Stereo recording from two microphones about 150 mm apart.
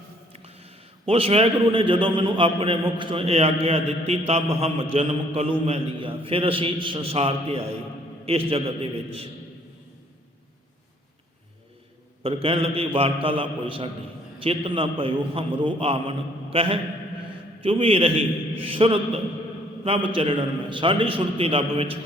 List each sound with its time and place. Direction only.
0.3 s a man's voice: 40° right (ahead or behind)
12.2 s a man's voice: 40° right (ahead or behind)